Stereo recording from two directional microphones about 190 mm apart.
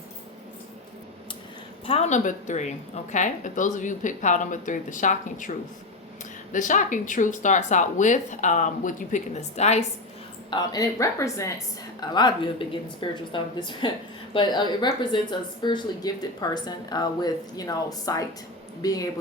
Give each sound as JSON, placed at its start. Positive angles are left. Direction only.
{"t": 1.9, "sound": "a woman's voice", "side_deg": 35}
{"t": 10.5, "sound": "a woman's voice", "side_deg": 20}